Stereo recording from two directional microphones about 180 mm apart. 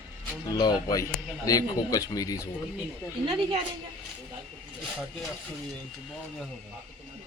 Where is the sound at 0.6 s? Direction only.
20° left (ahead or behind).